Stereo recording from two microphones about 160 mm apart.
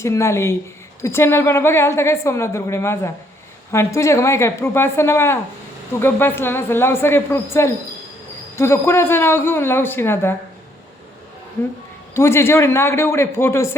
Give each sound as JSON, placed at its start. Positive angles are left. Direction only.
{"t": 0.0, "sound": "a woman's voice", "side_deg": 15}
{"t": 12.1, "sound": "a woman's voice", "side_deg": 15}